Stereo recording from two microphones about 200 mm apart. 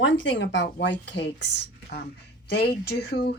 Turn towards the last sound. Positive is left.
turn(degrees=55)  # may be behind; listen again after turning